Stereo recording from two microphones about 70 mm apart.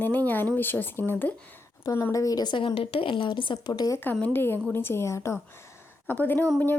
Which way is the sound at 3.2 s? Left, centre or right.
Left.